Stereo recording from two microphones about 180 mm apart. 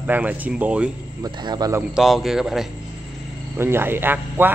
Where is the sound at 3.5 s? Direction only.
15° right (ahead or behind).